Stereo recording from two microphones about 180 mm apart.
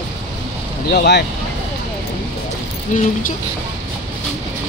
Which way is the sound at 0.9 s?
70° left (ahead or behind).